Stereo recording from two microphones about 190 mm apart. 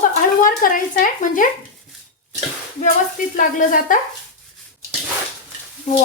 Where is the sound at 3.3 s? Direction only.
45° left (ahead or behind).